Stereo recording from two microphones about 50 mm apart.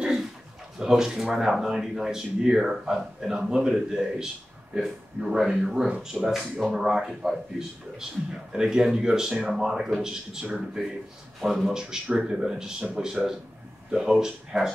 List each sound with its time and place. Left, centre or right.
0.0 s a sound: centre
0.7 s a man's voice: centre
10.4 s a man's voice: centre
11.4 s a man's voice: centre